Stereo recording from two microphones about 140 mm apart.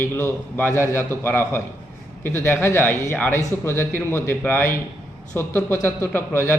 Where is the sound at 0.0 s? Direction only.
15° left (ahead or behind).